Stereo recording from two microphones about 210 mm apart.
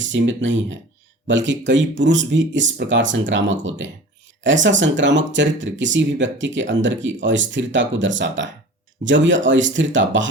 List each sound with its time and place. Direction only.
0.0 s speech: 60° right (ahead or behind)